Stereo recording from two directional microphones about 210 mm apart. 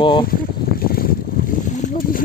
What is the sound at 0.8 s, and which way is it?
Boat, 45° left (ahead or behind).